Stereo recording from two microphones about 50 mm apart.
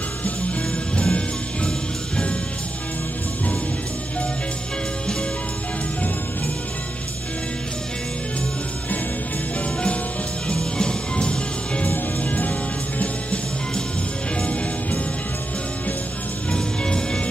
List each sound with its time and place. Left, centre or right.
0.2 s music: left
10.6 s music: centre
16.4 s music: centre